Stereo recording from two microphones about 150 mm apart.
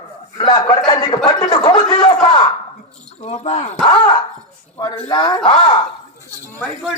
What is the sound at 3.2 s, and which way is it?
Speech, 45° left (ahead or behind).